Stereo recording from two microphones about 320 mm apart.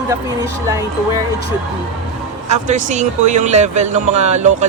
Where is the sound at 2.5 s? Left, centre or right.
Right.